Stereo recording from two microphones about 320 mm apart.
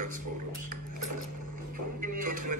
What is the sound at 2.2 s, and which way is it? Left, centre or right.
Music, right.